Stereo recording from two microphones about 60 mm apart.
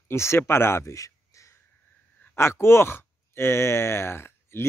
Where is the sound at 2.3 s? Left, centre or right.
Left.